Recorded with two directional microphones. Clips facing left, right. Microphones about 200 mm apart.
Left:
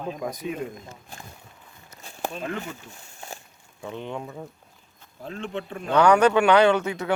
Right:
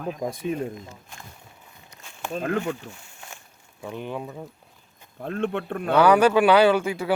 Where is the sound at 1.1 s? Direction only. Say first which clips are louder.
Left 2 dB; 35° left (ahead or behind).